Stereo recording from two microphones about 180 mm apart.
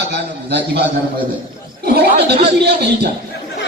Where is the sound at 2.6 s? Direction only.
65° right (ahead or behind).